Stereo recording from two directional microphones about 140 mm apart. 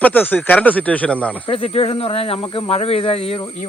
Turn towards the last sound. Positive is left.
turn(degrees=45)  # may be behind; listen again after turning